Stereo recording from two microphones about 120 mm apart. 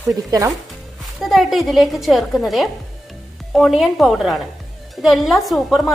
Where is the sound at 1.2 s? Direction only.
Centre (ahead or behind).